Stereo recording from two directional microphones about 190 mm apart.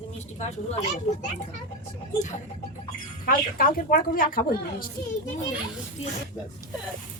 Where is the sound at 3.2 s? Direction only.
50° left (ahead or behind).